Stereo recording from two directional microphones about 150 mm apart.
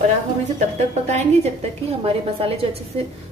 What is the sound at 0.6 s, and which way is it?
A woman's voice, 45° right (ahead or behind).